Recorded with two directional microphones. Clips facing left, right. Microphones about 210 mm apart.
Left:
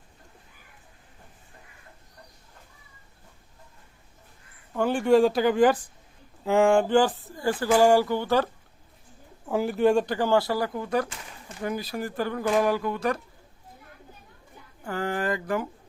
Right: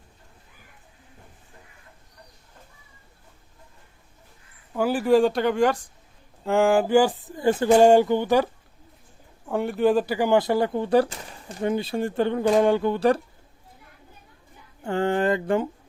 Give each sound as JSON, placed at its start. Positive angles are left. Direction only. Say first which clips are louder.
{"t": 4.7, "sound": "speech", "louder": "right 1 dB", "side_deg": -5}
{"t": 9.5, "sound": "speech", "louder": "right 1 dB", "side_deg": 0}
{"t": 14.8, "sound": "speech", "louder": "right 6 dB", "side_deg": -25}